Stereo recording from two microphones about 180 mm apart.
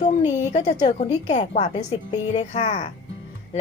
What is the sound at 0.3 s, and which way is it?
Speech, 40° left (ahead or behind).